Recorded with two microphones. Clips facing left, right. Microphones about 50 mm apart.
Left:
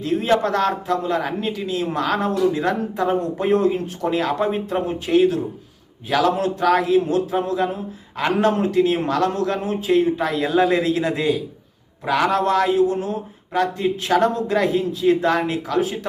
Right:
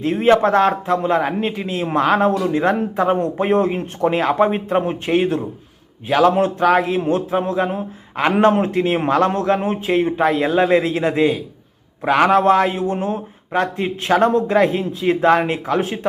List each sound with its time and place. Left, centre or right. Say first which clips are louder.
0.0 s a man's voice: right 5 dB; right
6.1 s a man's voice: right 4 dB; centre
6.3 s a man's voice: right 3 dB; right
12.0 s a man's voice: right 5 dB; right